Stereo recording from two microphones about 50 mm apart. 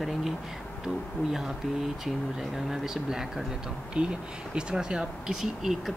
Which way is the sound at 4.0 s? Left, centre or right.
Right.